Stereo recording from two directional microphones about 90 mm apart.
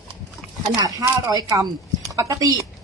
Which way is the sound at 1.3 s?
45° right (ahead or behind).